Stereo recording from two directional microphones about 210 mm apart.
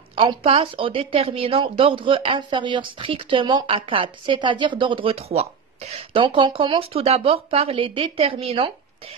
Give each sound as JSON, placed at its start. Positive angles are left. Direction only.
{"t": 0.1, "sound": "speech", "side_deg": -25}